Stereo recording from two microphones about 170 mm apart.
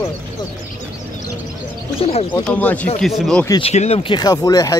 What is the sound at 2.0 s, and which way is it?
Speech, 35° left (ahead or behind).